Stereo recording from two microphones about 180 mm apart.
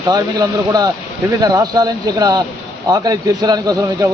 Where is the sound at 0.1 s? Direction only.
20° right (ahead or behind).